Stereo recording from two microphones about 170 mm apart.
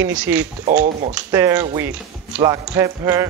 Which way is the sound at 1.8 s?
15° right (ahead or behind).